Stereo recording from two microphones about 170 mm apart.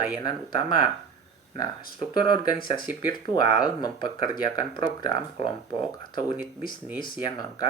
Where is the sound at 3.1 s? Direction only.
25° left (ahead or behind).